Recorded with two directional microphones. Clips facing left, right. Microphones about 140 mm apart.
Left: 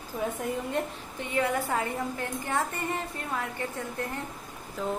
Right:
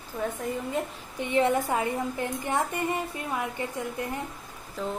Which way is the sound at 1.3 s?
25° right (ahead or behind).